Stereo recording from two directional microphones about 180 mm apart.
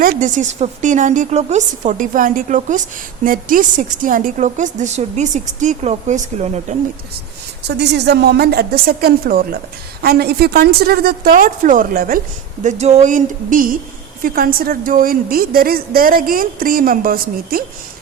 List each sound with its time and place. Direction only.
0.0 s a woman's voice: 50° right (ahead or behind)
7.7 s a woman's voice: 70° right (ahead or behind); by 12.2 s 50° right (ahead or behind)
12.6 s a woman's voice: 40° right (ahead or behind); by 17.6 s 55° right (ahead or behind)